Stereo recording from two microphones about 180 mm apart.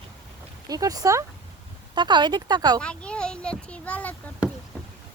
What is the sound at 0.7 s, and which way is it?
Speech, 20° right (ahead or behind).